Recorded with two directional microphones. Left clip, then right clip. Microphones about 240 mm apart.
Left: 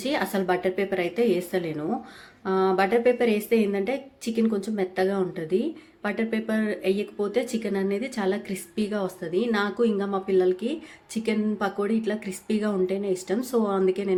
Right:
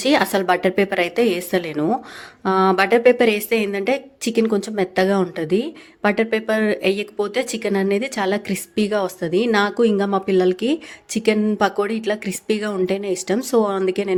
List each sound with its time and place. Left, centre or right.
0.0 s a woman's voice: right